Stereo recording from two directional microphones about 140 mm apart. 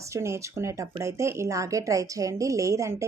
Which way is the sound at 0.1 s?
20° right (ahead or behind).